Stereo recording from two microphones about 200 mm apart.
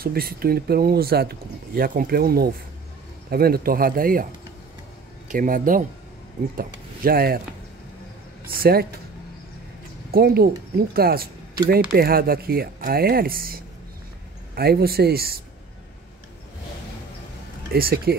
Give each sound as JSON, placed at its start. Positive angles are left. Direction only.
{"t": 0.0, "sound": "speech", "side_deg": -50}
{"t": 5.3, "sound": "speech", "side_deg": -40}
{"t": 8.5, "sound": "speech", "side_deg": -50}
{"t": 10.1, "sound": "speech", "side_deg": -50}
{"t": 17.7, "sound": "speech", "side_deg": -50}